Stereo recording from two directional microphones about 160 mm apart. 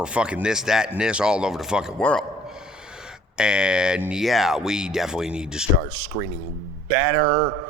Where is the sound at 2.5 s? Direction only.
5° right (ahead or behind).